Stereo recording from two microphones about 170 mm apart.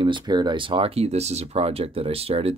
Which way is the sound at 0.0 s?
25° right (ahead or behind).